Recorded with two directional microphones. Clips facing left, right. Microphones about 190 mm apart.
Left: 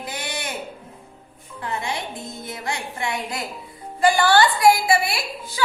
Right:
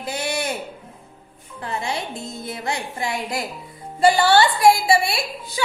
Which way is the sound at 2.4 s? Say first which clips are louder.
Right 2 dB; 25° right (ahead or behind).